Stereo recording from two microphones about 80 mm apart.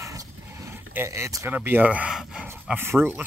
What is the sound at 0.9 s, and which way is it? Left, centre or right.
Speech, right.